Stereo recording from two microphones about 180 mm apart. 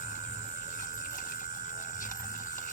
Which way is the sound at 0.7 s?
45° left (ahead or behind).